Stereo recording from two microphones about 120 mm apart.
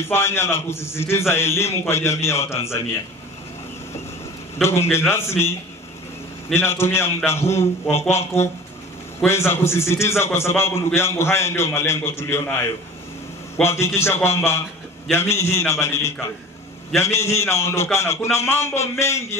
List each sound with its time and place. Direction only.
0.0 s a man's voice: 20° left (ahead or behind)
4.6 s a man's voice: 20° left (ahead or behind)